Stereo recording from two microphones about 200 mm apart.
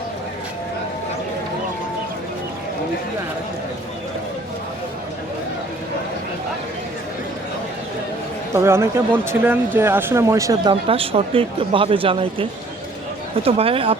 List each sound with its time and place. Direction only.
8.5 s speech: 10° right (ahead or behind); by 14.0 s 25° right (ahead or behind)